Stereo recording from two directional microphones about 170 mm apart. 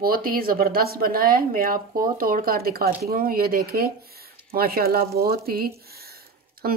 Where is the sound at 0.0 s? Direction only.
60° right (ahead or behind).